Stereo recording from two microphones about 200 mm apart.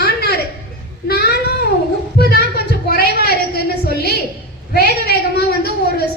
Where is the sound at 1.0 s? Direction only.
50° left (ahead or behind).